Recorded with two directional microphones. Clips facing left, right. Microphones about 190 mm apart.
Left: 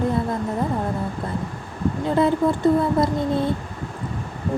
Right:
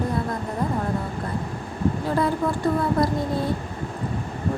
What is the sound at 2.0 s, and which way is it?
Speech, 20° left (ahead or behind).